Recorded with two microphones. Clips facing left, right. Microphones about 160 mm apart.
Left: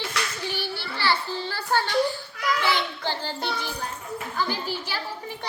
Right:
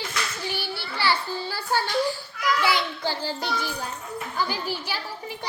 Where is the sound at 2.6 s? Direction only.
10° right (ahead or behind).